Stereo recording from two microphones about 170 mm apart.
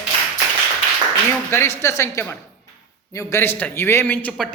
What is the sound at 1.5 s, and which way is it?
A man's voice, 15° left (ahead or behind).